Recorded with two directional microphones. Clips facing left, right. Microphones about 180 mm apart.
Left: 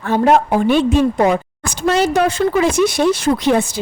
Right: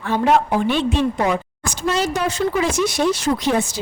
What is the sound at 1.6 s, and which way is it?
A woman's voice, 60° left (ahead or behind).